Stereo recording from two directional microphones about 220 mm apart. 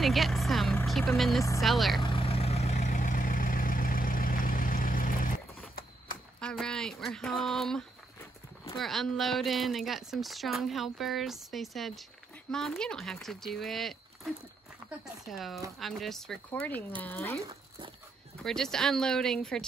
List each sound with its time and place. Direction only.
0.0 s speech: centre (ahead or behind)
2.0 s vehicle: 25° left (ahead or behind)
6.4 s a sound: 5° left (ahead or behind)
8.7 s speech: centre (ahead or behind)
18.4 s speech: centre (ahead or behind)